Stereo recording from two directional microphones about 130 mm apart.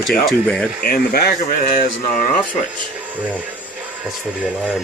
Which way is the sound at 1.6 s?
90° left.